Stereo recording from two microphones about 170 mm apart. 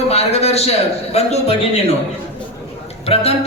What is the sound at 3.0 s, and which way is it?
Speech, 35° left (ahead or behind).